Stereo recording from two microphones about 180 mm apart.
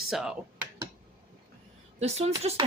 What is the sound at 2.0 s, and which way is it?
Speech, 35° right (ahead or behind).